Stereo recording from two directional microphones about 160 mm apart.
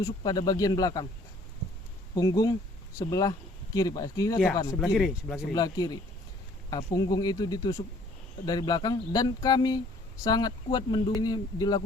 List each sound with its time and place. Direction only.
0.3 s speech: 25° left (ahead or behind)
2.1 s speech: 25° left (ahead or behind)
4.8 s speech: centre (ahead or behind)
5.5 s speech: 25° left (ahead or behind)